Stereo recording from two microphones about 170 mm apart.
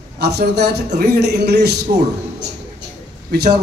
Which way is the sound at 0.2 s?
75° right (ahead or behind).